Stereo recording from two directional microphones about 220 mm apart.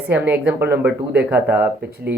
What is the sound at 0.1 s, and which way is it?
Speech, 10° right (ahead or behind).